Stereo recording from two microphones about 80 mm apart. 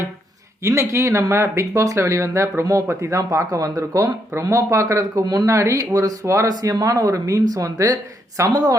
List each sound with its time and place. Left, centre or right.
0.6 s speech: right
5.5 s speech: right